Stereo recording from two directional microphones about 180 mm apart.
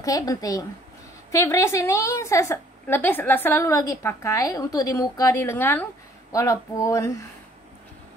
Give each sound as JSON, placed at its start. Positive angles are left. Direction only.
{"t": 0.0, "sound": "a woman's voice", "side_deg": 20}